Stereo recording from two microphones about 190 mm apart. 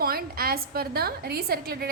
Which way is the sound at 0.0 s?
55° right (ahead or behind).